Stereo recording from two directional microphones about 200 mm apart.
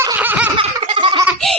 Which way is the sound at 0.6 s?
25° right (ahead or behind).